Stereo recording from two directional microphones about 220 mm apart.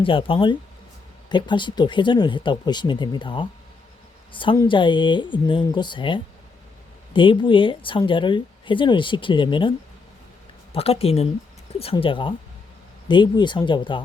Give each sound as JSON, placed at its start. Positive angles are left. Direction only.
{"t": 0.0, "sound": "a woman's voice", "side_deg": 25}